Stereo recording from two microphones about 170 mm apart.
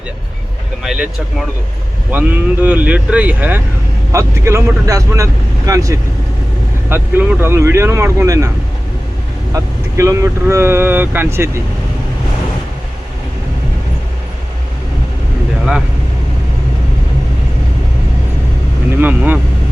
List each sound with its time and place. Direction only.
0.8 s speech: centre (ahead or behind); by 8.4 s 20° right (ahead or behind)
10.0 s speech: 15° right (ahead or behind)
18.9 s speech: 10° right (ahead or behind)